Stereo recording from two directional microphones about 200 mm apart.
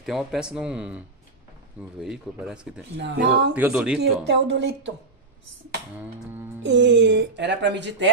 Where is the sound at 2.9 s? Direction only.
60° right (ahead or behind).